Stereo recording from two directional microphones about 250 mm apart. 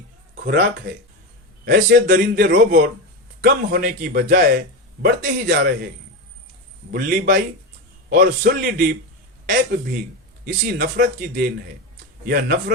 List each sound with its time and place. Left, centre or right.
0.3 s a man's voice: right
6.9 s a man's voice: right
10.4 s a man's voice: right